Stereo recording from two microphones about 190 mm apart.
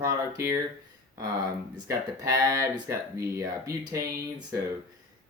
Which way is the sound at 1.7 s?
20° right (ahead or behind).